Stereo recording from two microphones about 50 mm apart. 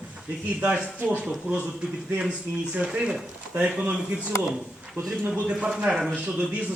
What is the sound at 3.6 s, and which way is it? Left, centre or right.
Speech, right.